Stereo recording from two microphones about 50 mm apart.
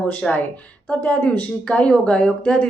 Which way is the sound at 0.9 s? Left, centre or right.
Left.